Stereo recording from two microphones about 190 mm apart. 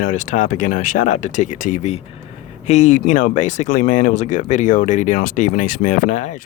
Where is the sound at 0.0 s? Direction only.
40° left (ahead or behind).